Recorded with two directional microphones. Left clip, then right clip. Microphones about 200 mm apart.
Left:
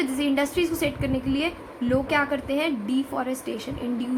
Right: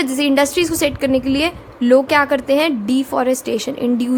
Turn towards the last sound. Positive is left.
turn(degrees=-50)  # may be behind; listen again after turning